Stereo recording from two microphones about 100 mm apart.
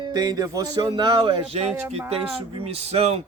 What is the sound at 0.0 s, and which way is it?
A man's voice, 45° right (ahead or behind).